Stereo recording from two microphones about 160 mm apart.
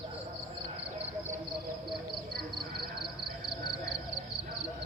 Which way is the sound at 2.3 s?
70° right (ahead or behind).